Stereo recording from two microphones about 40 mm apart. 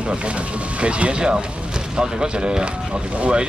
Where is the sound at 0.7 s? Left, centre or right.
Right.